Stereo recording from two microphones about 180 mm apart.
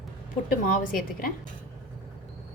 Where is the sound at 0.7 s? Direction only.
50° left (ahead or behind).